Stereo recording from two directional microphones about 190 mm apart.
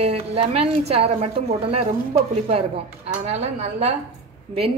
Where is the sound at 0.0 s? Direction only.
30° right (ahead or behind).